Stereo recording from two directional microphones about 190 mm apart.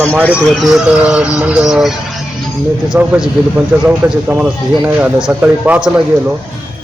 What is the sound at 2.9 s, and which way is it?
Speech, 5° right (ahead or behind).